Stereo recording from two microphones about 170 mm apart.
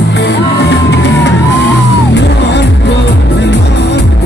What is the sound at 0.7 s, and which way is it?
Music, 90° left.